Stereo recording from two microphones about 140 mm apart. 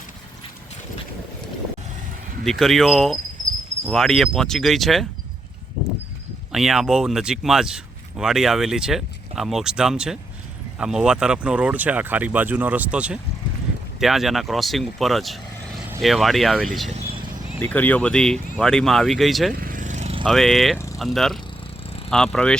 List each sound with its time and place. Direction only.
2.4 s speech: centre (ahead or behind)
6.5 s speech: 5° right (ahead or behind)
17.6 s speech: 10° left (ahead or behind)
19.5 s vehicle: 80° right; by 20.1 s 55° right (ahead or behind)
20.2 s speech: centre (ahead or behind)
20.7 s vehicle: 20° left (ahead or behind)
21.0 s speech: centre (ahead or behind)